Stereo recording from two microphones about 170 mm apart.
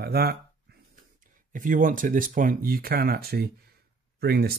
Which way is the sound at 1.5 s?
50° right (ahead or behind).